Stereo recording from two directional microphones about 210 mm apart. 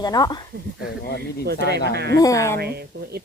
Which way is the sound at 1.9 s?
50° right (ahead or behind).